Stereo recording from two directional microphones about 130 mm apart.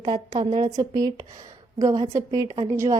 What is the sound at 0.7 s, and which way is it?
A woman's voice, 25° right (ahead or behind).